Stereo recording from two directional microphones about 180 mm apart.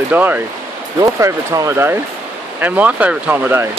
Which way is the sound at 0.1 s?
10° right (ahead or behind).